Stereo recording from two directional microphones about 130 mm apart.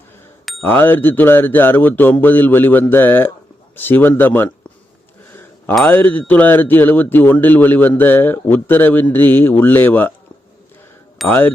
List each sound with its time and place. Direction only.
0.6 s speech: 15° left (ahead or behind)
5.3 s a sound: 15° left (ahead or behind)
5.8 s speech: 15° left (ahead or behind)
11.3 s speech: 15° left (ahead or behind)